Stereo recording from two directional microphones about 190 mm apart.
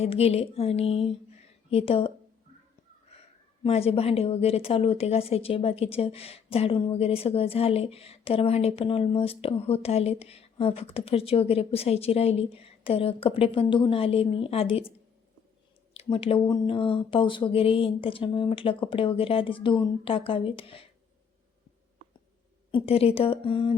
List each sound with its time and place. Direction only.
0.0 s a woman's voice: 30° left (ahead or behind)
3.6 s a woman's voice: 30° left (ahead or behind)
16.0 s speech: 30° left (ahead or behind)
22.7 s speech: 30° left (ahead or behind)